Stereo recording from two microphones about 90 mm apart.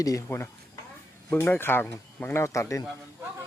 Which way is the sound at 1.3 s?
25° left (ahead or behind).